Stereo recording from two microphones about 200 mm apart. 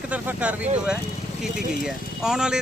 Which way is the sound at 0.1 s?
5° right (ahead or behind).